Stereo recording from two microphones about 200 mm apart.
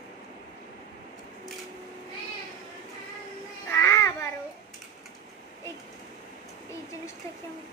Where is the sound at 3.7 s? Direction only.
15° left (ahead or behind).